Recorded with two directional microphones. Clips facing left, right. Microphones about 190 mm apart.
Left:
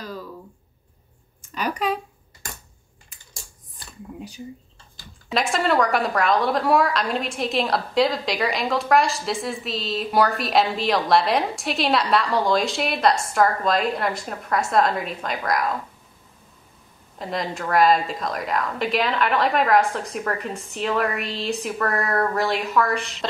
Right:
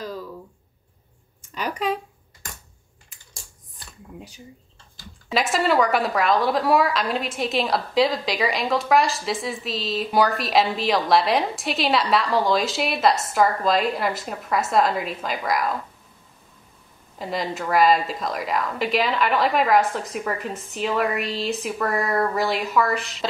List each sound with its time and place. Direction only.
1.5 s a sound: 25° right (ahead or behind)
5.3 s a woman's voice: centre (ahead or behind)
17.2 s a woman's voice: centre (ahead or behind)